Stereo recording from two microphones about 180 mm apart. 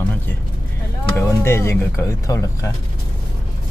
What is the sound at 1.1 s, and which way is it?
Speech, 15° left (ahead or behind).